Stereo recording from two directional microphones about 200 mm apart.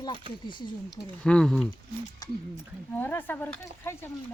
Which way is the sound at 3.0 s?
10° left (ahead or behind).